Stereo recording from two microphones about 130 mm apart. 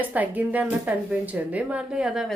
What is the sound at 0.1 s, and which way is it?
Speech, 10° right (ahead or behind).